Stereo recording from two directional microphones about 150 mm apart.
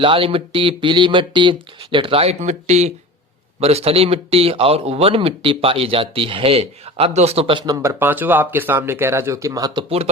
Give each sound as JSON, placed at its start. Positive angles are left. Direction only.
{"t": 0.0, "sound": "speech", "side_deg": -35}
{"t": 7.6, "sound": "speech", "side_deg": -20}